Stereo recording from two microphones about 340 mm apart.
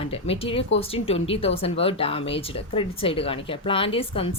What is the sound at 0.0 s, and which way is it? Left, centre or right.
Speech, centre.